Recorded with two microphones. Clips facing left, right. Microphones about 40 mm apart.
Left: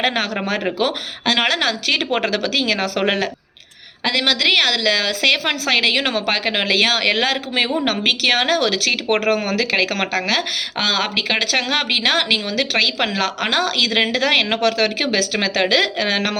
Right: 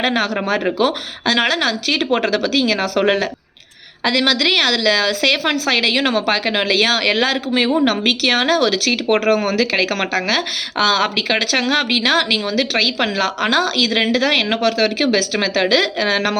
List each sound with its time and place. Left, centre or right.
0.0 s a woman's voice: left
2.0 s a woman's voice: left
2.3 s speech: left
4.0 s a woman's voice: left
7.3 s a woman's voice: left
11.7 s a woman's voice: left
15.0 s a woman's voice: left